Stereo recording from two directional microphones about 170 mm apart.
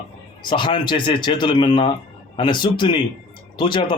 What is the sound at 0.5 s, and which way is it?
Speech, 30° left (ahead or behind).